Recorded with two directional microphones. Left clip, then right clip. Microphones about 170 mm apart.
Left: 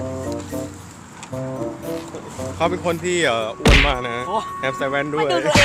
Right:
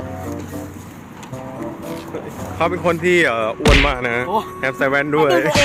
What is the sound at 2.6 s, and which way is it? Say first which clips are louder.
Speech: right 4 dB; 10° left (ahead or behind).